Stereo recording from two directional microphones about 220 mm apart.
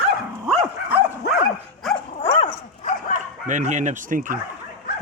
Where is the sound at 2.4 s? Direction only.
35° left (ahead or behind).